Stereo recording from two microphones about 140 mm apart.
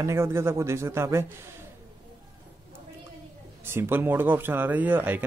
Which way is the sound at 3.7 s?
15° right (ahead or behind).